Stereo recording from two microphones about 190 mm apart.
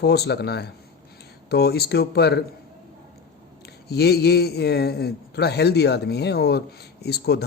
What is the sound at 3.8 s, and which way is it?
A man's voice, 60° left (ahead or behind).